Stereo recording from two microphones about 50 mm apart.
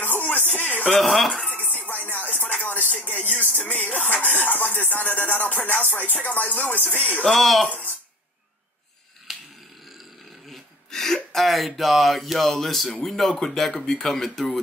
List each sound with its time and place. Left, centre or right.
0.0 s music: left
0.8 s speech: centre
1.5 s music: left
7.0 s speech: left
7.2 s speech: centre
9.3 s a sound: centre
10.9 s speech: centre